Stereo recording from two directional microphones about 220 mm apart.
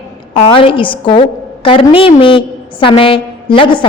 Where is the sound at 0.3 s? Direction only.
25° left (ahead or behind).